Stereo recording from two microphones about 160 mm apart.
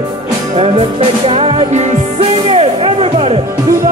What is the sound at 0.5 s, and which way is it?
Music, 40° right (ahead or behind).